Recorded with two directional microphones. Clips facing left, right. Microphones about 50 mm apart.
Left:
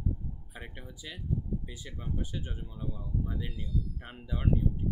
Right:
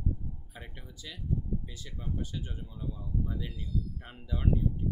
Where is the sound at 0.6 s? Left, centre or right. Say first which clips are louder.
Left 2 dB; centre.